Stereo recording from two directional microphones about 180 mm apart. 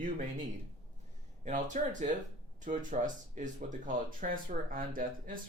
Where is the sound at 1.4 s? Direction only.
40° right (ahead or behind).